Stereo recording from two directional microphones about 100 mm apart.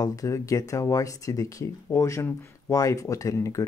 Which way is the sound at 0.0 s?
35° left (ahead or behind).